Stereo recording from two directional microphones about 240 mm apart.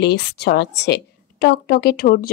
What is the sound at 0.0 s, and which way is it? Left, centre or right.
A woman's voice, left.